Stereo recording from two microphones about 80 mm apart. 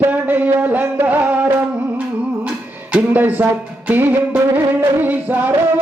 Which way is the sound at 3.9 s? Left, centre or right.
Right.